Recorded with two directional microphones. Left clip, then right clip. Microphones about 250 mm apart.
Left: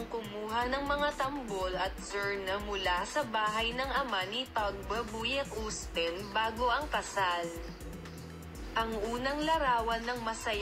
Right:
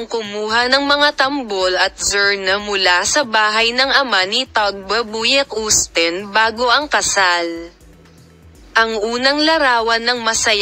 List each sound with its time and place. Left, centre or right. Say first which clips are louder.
0.1 s speech: right 18 dB; right
8.7 s speech: right 18 dB; right